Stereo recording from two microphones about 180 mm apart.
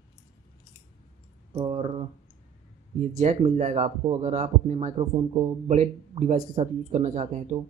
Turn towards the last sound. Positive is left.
turn(degrees=-40)  # may be behind; listen again after turning